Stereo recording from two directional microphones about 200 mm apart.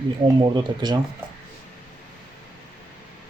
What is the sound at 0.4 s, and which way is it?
Speech, 20° right (ahead or behind).